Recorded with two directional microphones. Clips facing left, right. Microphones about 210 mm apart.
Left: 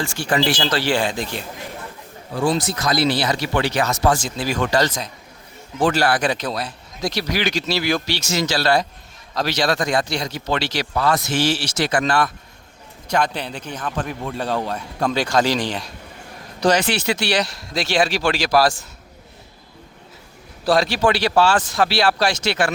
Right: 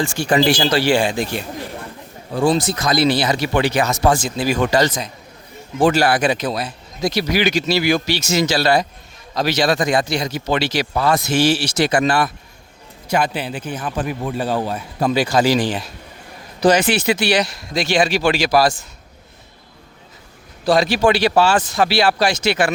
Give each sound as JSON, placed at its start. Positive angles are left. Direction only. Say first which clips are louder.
{"t": 0.2, "sound": "speech", "louder": "right 4 dB", "side_deg": -15}
{"t": 2.3, "sound": "speech", "louder": "right 3 dB", "side_deg": -25}
{"t": 5.8, "sound": "a man's voice", "louder": "right 3 dB", "side_deg": -10}
{"t": 8.0, "sound": "speech", "louder": "right 4 dB", "side_deg": -20}
{"t": 9.3, "sound": "a man's voice", "louder": "right 3 dB", "side_deg": -5}
{"t": 9.7, "sound": "a man's voice", "louder": "right 3 dB", "side_deg": -20}
{"t": 20.7, "sound": "a man's voice", "louder": "right 2 dB", "side_deg": 0}
{"t": 21.0, "sound": "speech", "louder": "right 3 dB", "side_deg": -15}
{"t": 21.4, "sound": "a man's voice", "louder": "right 2 dB", "side_deg": -5}
{"t": 22.4, "sound": "speech", "louder": "right 4 dB", "side_deg": -15}